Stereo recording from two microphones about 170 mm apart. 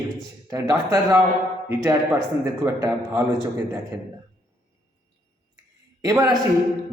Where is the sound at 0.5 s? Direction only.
20° right (ahead or behind).